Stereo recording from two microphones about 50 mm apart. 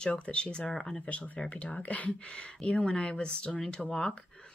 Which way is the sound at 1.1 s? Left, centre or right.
Left.